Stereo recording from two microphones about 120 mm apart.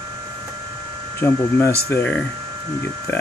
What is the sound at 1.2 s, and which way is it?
Speech, 20° left (ahead or behind).